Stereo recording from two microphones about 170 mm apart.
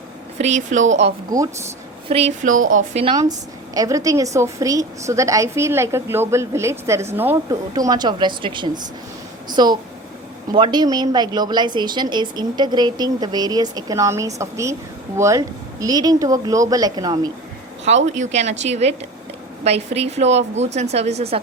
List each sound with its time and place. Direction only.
0.3 s a woman's voice: 40° right (ahead or behind)
1.3 s a woman's voice: 20° right (ahead or behind)
2.0 s speech: 40° right (ahead or behind)
3.8 s a woman's voice: 20° right (ahead or behind)
7.7 s a woman's voice: 25° right (ahead or behind)
17.8 s speech: 40° right (ahead or behind)